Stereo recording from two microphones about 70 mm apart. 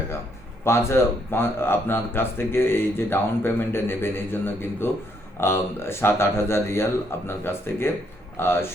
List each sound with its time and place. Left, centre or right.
0.6 s speech: left